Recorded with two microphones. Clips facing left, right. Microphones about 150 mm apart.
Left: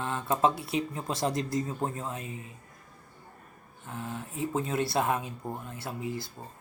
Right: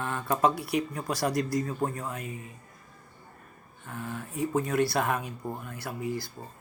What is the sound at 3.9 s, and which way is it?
Speech, 25° left (ahead or behind).